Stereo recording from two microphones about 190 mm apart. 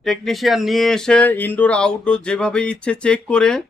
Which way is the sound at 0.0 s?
Centre (ahead or behind).